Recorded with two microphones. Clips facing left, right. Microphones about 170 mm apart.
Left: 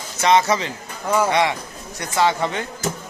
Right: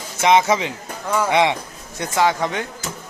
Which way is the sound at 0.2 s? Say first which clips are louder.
Right 1 dB; 15° right (ahead or behind).